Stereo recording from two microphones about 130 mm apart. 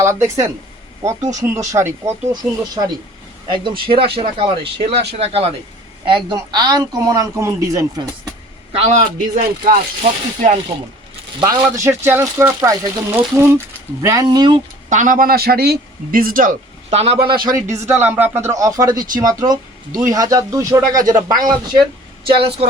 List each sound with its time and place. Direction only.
0.0 s speech: 20° right (ahead or behind)
1.2 s speech: 70° right (ahead or behind)
1.5 s a man's voice: 20° right (ahead or behind); by 5.5 s 50° right (ahead or behind)
6.1 s a man's voice: 40° right (ahead or behind)
8.7 s speech: 60° right (ahead or behind); by 9.7 s 80° right
10.0 s speech: 65° right (ahead or behind)
11.4 s a man's voice: 25° right (ahead or behind)
14.8 s speech: 80° right
16.9 s a man's voice: 50° right (ahead or behind)
17.7 s speech: 15° right (ahead or behind); by 21.6 s 30° right (ahead or behind)
22.4 s speech: 50° right (ahead or behind)